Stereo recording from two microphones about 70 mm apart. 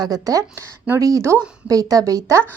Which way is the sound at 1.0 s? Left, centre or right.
Right.